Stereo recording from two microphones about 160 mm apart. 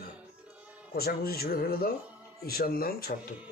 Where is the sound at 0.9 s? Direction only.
75° left (ahead or behind).